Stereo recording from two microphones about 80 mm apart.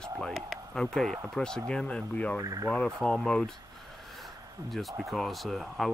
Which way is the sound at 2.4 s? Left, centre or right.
Right.